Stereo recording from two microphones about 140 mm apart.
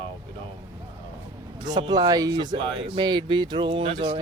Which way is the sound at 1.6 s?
30° right (ahead or behind).